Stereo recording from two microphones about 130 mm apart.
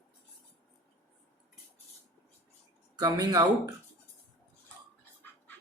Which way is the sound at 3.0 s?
30° right (ahead or behind).